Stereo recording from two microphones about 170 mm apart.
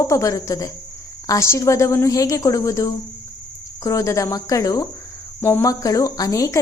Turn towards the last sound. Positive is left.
turn(degrees=20)  # may be behind; listen again after turning